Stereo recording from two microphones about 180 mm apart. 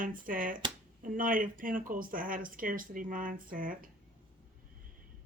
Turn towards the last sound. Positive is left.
turn(degrees=-50)  # may be behind; listen again after turning